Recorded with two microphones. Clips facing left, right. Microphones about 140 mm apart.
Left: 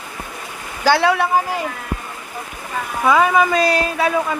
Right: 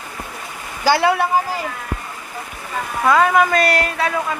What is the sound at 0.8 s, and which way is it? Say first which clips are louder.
Speech: even; 10° right (ahead or behind).